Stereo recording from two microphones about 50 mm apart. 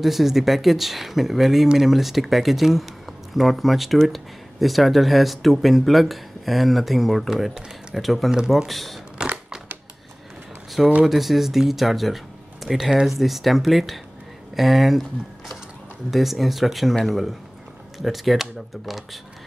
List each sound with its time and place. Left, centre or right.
0.0 s speech: centre
11.1 s speech: centre